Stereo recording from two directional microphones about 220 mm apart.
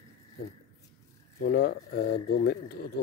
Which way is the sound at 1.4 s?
45° left (ahead or behind).